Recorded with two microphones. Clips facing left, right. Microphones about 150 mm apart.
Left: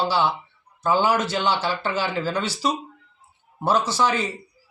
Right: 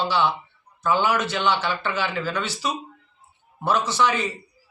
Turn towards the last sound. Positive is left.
turn(degrees=35)  # may be behind; listen again after turning